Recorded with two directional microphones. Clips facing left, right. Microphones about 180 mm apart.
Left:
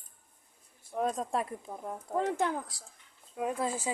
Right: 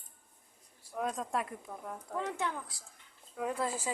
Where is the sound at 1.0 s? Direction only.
30° left (ahead or behind).